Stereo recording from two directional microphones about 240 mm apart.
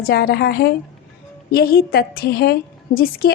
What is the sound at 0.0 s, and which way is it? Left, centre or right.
A woman's voice, left.